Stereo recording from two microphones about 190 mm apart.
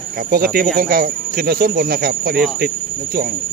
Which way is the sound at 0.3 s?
50° right (ahead or behind).